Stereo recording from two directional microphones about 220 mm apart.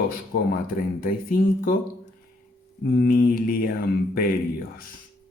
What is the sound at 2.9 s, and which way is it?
Speech, 45° left (ahead or behind).